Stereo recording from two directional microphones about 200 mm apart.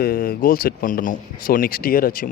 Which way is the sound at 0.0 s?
45° left (ahead or behind).